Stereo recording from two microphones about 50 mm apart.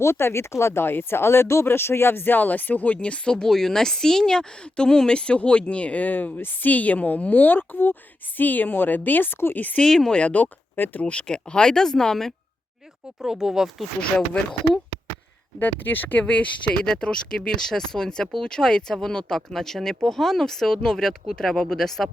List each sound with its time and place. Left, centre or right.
0.0 s speech: left
9.8 s speech: centre
10.1 s speech: left
10.8 s speech: left
11.0 s speech: left
13.2 s speech: centre
15.5 s speech: left
16.2 s speech: left
16.8 s speech: centre